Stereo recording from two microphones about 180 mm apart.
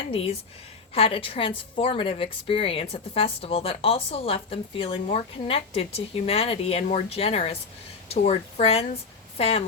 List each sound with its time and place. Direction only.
0.1 s speech: 30° left (ahead or behind)